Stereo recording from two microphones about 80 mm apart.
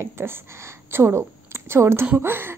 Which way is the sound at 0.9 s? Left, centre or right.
Right.